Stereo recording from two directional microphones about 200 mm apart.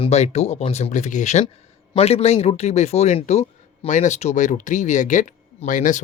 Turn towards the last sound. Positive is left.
turn(degrees=40)  # may be behind; listen again after turning